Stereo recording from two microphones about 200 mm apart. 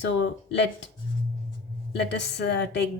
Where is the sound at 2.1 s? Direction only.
60° left (ahead or behind).